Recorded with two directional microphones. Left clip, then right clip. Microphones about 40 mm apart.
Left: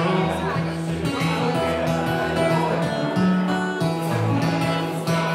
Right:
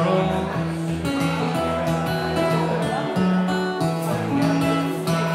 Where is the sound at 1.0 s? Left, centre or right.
Centre.